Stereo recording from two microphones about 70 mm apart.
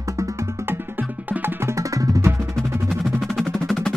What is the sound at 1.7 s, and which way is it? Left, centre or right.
Percussion, right.